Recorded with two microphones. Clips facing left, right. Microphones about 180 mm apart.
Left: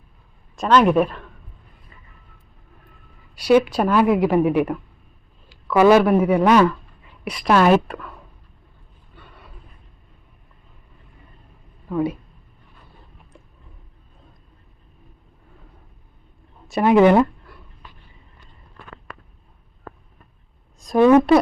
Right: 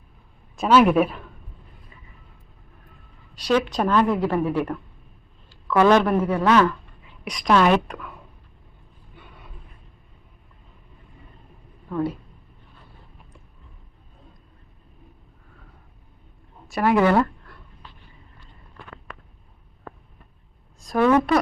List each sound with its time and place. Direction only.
0.5 s a woman's voice: 5° right (ahead or behind)
3.3 s a woman's voice: 10° left (ahead or behind)
11.9 s a woman's voice: 10° left (ahead or behind)
16.6 s speech: 20° left (ahead or behind)
20.8 s speech: 20° left (ahead or behind)